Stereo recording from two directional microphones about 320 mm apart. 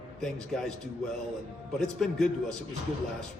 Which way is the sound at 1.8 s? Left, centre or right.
Centre.